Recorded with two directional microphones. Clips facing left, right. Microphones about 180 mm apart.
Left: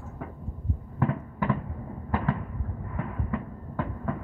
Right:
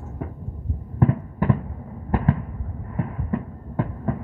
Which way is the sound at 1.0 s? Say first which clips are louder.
Right 6 dB; 40° right (ahead or behind).